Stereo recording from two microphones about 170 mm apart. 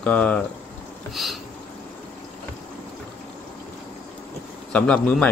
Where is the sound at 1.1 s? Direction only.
Centre (ahead or behind).